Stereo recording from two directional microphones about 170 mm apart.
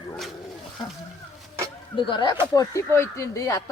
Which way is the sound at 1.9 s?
30° left (ahead or behind).